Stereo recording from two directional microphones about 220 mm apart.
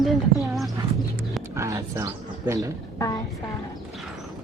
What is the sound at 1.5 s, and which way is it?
Speech, 15° right (ahead or behind).